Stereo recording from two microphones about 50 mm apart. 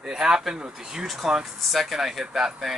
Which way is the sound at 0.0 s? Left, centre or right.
Centre.